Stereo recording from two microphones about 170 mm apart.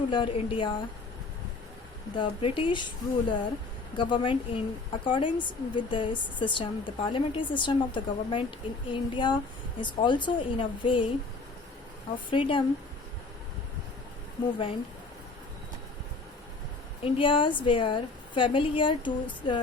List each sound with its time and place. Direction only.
0.1 s a woman's voice: 30° left (ahead or behind)
2.1 s a woman's voice: 30° left (ahead or behind)
12.3 s speech: 30° left (ahead or behind)
17.0 s a woman's voice: 30° left (ahead or behind)